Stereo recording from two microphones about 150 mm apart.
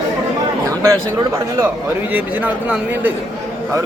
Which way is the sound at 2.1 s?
10° right (ahead or behind).